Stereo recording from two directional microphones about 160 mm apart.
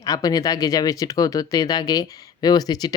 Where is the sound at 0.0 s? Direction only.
25° left (ahead or behind).